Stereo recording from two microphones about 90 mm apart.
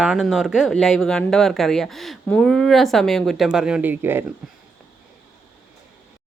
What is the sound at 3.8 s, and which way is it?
Speech, 25° right (ahead or behind).